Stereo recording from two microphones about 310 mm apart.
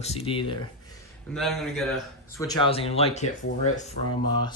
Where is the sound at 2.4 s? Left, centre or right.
Centre.